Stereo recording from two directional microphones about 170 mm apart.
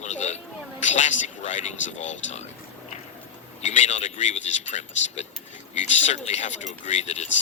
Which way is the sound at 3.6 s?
45° left (ahead or behind).